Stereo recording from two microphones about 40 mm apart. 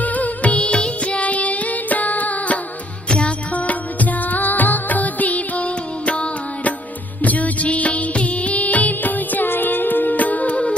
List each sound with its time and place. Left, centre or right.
0.0 s music: left
3.1 s music: left
3.5 s music of bollywood: left
7.2 s music: left